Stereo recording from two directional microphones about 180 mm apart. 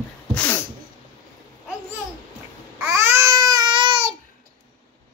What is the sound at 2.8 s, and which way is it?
Babbling, 15° right (ahead or behind).